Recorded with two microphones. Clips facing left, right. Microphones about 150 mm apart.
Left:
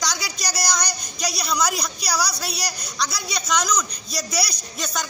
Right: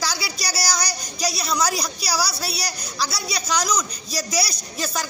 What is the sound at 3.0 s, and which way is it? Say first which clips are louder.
A woman's voice: right 1 dB; 5° right (ahead or behind).